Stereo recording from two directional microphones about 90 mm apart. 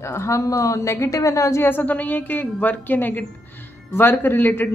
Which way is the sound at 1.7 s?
20° left (ahead or behind).